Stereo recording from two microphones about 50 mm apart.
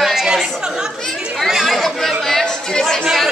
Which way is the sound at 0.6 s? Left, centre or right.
Centre.